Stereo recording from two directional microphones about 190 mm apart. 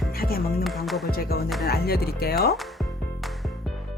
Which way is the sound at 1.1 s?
55° left (ahead or behind).